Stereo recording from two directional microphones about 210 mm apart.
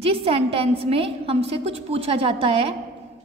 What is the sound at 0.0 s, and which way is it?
A woman's voice, 25° right (ahead or behind).